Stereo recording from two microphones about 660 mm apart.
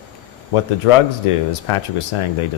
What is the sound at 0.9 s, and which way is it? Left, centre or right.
Speech, left.